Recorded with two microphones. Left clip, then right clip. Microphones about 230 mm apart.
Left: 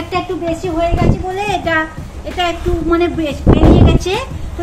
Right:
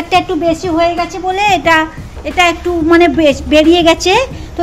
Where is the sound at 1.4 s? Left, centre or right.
Right.